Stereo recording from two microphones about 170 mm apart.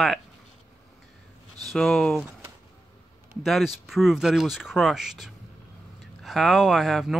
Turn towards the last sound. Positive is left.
turn(degrees=0)  # may be behind; listen again after turning